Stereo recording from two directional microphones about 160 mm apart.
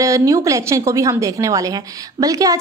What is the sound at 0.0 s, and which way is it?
A woman's voice, 20° right (ahead or behind).